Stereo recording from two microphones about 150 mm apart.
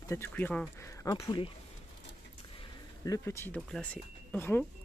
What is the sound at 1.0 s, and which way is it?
Speech, 20° left (ahead or behind).